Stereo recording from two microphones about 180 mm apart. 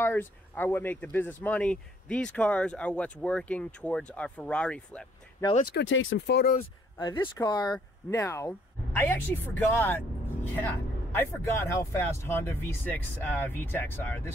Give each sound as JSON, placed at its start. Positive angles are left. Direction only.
{"t": 0.0, "sound": "speech", "side_deg": 10}
{"t": 5.7, "sound": "speech", "side_deg": 80}
{"t": 7.2, "sound": "speech", "side_deg": 20}